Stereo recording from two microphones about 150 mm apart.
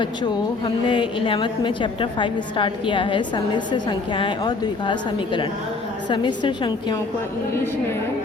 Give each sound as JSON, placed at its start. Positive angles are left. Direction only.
{"t": 0.0, "sound": "a woman's voice", "side_deg": 30}